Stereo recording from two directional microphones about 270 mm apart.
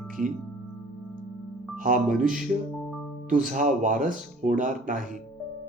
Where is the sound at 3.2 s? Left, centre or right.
Right.